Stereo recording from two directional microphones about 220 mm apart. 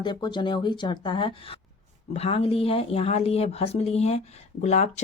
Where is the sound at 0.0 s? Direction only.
20° left (ahead or behind).